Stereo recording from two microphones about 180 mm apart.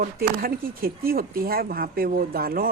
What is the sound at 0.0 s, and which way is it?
Speech, 55° right (ahead or behind).